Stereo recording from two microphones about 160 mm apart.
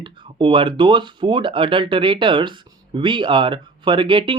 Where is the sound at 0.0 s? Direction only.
30° right (ahead or behind).